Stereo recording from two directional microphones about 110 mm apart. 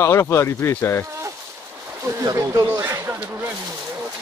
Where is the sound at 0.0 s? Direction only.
25° left (ahead or behind).